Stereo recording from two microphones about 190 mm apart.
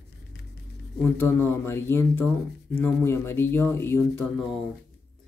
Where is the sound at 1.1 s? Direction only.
10° left (ahead or behind).